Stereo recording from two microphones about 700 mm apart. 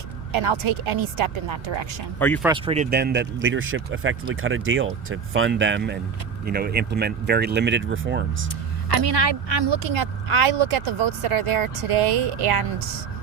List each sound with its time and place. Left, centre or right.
0.3 s speech: right
2.1 s speech: centre
8.9 s speech: right